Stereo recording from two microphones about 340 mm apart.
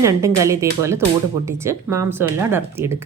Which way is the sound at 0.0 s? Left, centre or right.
Centre.